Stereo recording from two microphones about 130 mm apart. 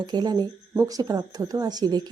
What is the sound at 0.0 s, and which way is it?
A woman's voice, 35° right (ahead or behind).